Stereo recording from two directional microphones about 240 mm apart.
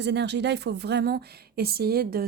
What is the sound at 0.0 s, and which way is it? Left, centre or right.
A woman's voice, right.